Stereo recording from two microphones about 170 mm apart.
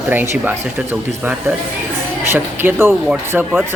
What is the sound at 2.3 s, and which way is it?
A man's voice, 15° right (ahead or behind).